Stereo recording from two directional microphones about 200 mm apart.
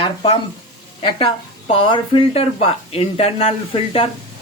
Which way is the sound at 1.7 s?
25° left (ahead or behind).